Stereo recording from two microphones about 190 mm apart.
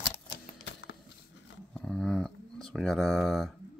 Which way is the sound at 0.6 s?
70° left (ahead or behind).